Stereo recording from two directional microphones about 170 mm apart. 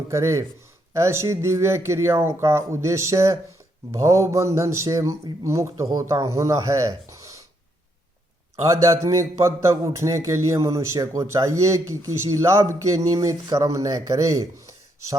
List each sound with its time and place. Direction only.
0.1 s a man's voice: 15° right (ahead or behind)
8.6 s a man's voice: 20° right (ahead or behind)